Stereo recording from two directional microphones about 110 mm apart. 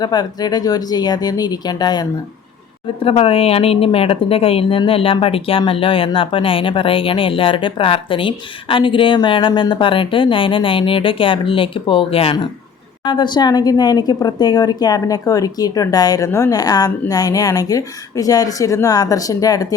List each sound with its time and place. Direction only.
0.0 s a woman's voice: 40° left (ahead or behind)
3.0 s a woman's voice: 55° left (ahead or behind)
13.1 s a woman's voice: 45° left (ahead or behind)